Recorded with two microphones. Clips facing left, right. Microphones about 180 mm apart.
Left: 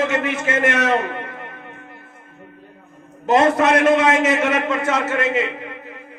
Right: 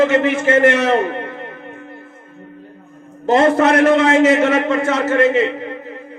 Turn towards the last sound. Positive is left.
turn(degrees=-30)  # may be behind; listen again after turning